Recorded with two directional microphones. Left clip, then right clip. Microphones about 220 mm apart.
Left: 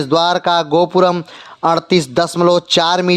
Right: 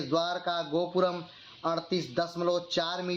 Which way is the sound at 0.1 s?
55° left (ahead or behind).